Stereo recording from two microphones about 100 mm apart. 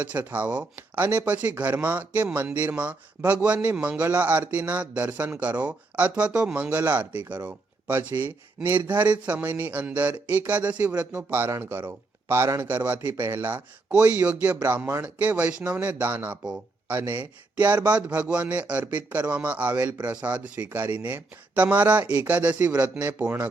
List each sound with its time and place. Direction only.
0.0 s speech: 15° right (ahead or behind)